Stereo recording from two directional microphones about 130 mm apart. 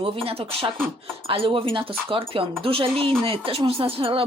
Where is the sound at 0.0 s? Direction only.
45° right (ahead or behind).